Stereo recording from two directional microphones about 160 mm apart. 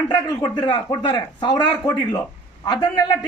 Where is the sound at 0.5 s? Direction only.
30° left (ahead or behind).